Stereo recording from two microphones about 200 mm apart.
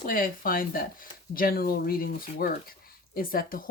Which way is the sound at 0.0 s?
45° left (ahead or behind).